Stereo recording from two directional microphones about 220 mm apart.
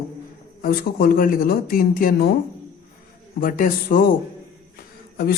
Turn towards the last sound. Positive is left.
turn(degrees=45)  # may be behind; listen again after turning